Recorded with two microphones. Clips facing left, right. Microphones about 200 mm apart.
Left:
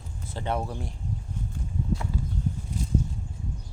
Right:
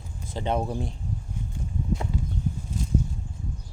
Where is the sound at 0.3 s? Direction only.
20° right (ahead or behind).